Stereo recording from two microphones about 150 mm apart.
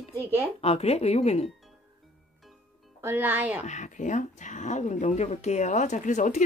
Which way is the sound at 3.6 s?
55° left (ahead or behind).